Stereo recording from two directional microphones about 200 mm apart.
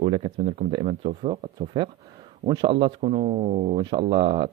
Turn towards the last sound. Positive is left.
turn(degrees=-25)  # may be behind; listen again after turning